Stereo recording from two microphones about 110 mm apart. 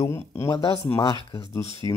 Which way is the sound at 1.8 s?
35° left (ahead or behind).